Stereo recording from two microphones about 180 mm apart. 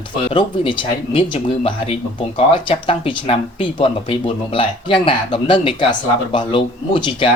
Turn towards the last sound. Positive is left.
turn(degrees=25)  # may be behind; listen again after turning